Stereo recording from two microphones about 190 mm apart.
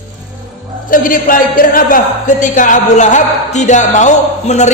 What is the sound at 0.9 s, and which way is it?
Speech, 45° left (ahead or behind).